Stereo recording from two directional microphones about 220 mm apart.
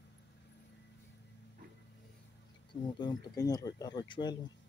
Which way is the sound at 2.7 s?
20° left (ahead or behind).